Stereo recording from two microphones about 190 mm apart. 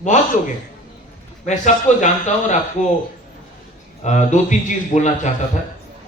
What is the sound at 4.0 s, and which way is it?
A man's voice, 40° left (ahead or behind).